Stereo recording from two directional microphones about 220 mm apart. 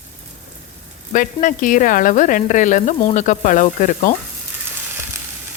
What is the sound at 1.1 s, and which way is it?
Speech, 35° left (ahead or behind).